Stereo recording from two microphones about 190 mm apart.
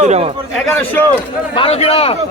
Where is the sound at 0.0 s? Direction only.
35° right (ahead or behind).